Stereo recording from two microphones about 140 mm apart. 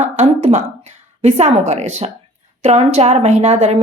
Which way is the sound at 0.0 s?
55° right (ahead or behind).